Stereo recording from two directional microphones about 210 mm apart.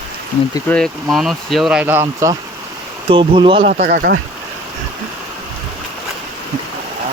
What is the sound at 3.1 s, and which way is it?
Dog, 25° right (ahead or behind).